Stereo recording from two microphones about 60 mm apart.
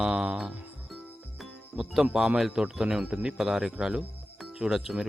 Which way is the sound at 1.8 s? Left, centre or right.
Centre.